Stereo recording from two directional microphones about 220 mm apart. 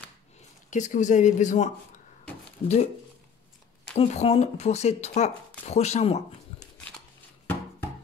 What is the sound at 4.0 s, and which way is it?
Speech, 25° left (ahead or behind).